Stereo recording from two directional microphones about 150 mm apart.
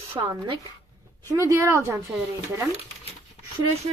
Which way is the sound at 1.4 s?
20° right (ahead or behind).